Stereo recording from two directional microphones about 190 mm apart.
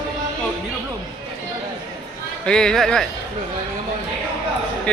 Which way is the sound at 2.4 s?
5° left (ahead or behind).